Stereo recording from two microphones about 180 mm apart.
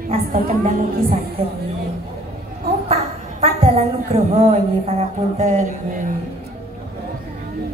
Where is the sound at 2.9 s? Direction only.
35° right (ahead or behind).